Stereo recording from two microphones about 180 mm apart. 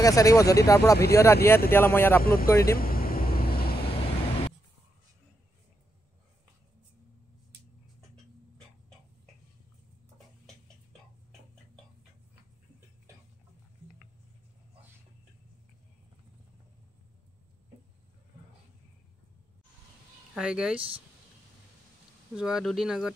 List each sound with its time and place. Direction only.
0.0 s speech: 20° left (ahead or behind)
2.2 s speech: 55° left (ahead or behind)
2.5 s speech: 15° left (ahead or behind)
2.8 s vehicle: 55° left (ahead or behind)
10.1 s tick-tock: 5° left (ahead or behind)
20.3 s speech: 5° right (ahead or behind)
22.4 s speech: centre (ahead or behind)